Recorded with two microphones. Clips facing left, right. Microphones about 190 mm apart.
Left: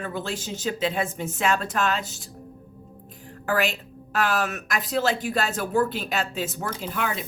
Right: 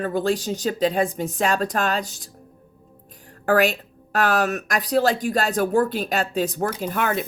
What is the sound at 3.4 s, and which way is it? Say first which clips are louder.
A woman's voice: right 6 dB; 45° right (ahead or behind).